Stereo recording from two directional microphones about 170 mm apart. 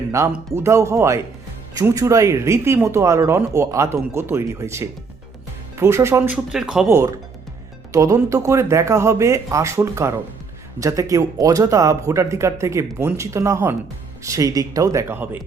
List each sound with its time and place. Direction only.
0.2 s speech: 20° right (ahead or behind); by 6.8 s 5° right (ahead or behind)
6.8 s speech: 15° right (ahead or behind)